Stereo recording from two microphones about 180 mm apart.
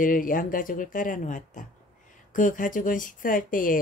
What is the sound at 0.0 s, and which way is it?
Speech, 50° left (ahead or behind).